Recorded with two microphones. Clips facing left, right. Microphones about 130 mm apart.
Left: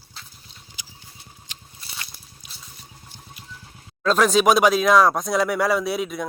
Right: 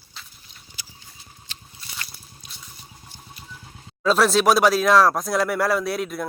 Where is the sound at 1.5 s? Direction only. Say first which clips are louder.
Right 2 dB; 15° left (ahead or behind).